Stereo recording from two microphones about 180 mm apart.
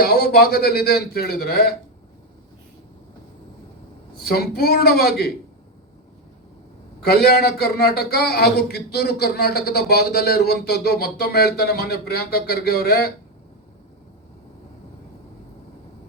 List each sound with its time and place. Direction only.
0.0 s a man's voice: 60° left (ahead or behind)
4.2 s a man's voice: 60° left (ahead or behind)
7.0 s a man's voice: 60° left (ahead or behind)